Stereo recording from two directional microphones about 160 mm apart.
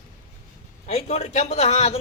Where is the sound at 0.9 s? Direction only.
40° left (ahead or behind).